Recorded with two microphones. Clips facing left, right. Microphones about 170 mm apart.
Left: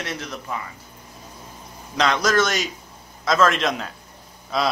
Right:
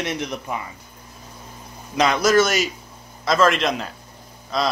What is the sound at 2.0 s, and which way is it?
Speech, 5° right (ahead or behind).